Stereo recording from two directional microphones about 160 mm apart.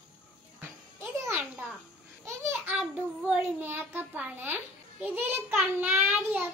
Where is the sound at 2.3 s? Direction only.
15° right (ahead or behind).